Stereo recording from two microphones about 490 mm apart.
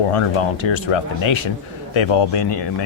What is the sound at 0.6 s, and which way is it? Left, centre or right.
Speech, left.